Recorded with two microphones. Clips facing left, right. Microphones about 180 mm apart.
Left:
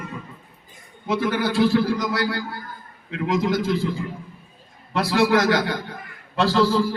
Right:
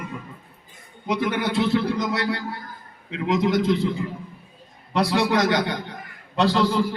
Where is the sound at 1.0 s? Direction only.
20° right (ahead or behind).